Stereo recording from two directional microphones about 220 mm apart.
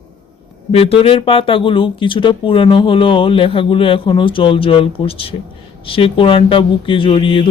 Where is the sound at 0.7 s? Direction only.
25° left (ahead or behind).